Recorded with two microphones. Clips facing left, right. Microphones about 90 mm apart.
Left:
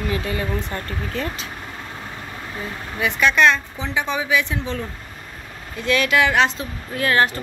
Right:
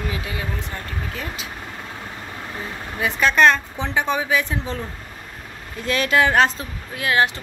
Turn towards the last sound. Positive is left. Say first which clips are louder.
# left 1 dB
turn(degrees=-15)  # may be behind; listen again after turning